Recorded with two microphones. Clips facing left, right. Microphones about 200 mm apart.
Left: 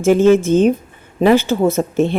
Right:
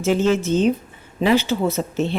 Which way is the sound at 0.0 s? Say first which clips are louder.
Left 7 dB; 50° left (ahead or behind).